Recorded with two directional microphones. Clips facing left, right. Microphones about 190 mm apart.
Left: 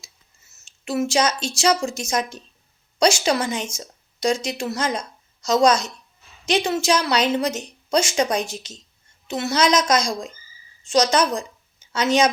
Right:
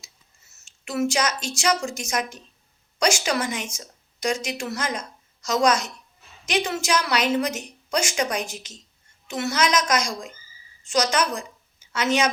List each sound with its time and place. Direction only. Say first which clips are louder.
0.6 s a woman's voice: left 1 dB; 25° left (ahead or behind)